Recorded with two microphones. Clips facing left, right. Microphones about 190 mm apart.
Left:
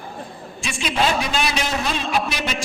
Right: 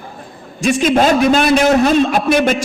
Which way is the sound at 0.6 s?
45° right (ahead or behind).